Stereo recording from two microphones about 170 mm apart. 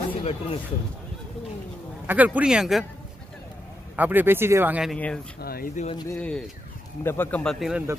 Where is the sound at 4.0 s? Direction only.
10° right (ahead or behind).